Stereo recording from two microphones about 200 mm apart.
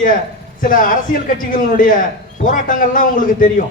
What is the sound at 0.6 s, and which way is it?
A man's voice, 45° left (ahead or behind).